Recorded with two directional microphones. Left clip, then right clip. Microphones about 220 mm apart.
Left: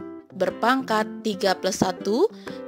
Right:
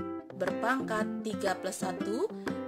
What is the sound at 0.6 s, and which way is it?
A woman's voice, 40° left (ahead or behind).